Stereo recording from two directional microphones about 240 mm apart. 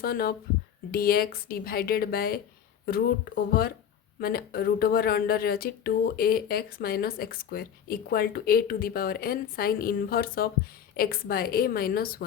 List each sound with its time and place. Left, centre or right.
0.0 s speech: left